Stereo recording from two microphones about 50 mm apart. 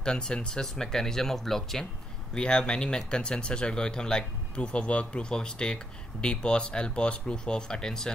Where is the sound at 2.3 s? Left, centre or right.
Centre.